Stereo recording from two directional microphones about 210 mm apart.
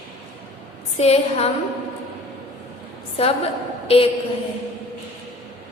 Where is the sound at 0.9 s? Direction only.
30° left (ahead or behind).